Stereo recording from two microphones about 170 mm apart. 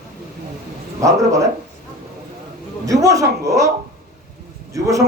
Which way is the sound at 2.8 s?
20° right (ahead or behind).